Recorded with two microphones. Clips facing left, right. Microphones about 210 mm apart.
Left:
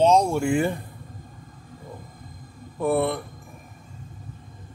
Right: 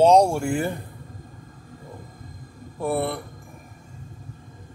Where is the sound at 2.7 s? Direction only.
10° right (ahead or behind).